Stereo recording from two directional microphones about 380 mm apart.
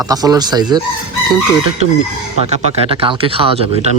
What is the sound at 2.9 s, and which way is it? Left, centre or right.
Speech, centre.